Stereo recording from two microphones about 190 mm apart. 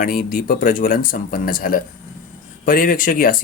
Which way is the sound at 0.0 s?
50° left (ahead or behind).